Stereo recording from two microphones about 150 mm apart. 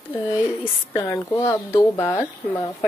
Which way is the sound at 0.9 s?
20° left (ahead or behind).